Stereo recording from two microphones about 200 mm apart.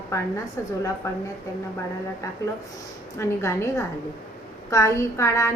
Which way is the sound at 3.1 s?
15° left (ahead or behind).